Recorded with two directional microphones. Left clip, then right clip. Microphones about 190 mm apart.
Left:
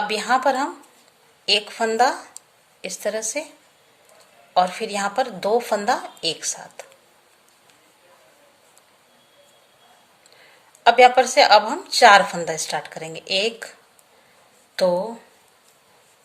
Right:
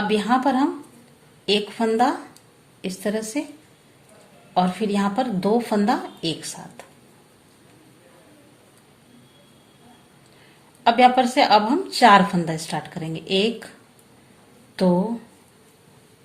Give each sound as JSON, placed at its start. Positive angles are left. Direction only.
{"t": 0.1, "sound": "a woman's voice", "side_deg": 30}
{"t": 4.5, "sound": "a woman's voice", "side_deg": 30}
{"t": 10.8, "sound": "a woman's voice", "side_deg": 30}
{"t": 14.8, "sound": "a woman's voice", "side_deg": 30}